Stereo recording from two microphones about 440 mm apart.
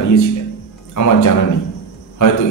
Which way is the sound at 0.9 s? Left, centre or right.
Left.